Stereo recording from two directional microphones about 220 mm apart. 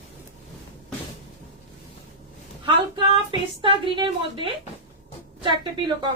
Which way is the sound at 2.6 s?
25° right (ahead or behind).